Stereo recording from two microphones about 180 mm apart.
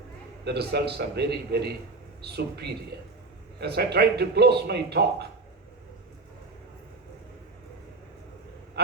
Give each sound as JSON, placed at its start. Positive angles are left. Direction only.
{"t": 0.4, "sound": "speech", "side_deg": -65}